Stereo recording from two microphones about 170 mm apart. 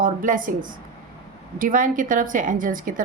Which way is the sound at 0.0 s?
55° right (ahead or behind).